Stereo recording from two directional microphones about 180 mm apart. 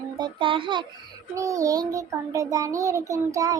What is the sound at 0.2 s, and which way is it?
A child's voice, 25° right (ahead or behind).